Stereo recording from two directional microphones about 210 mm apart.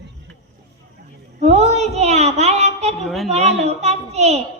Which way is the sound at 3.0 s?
Centre (ahead or behind).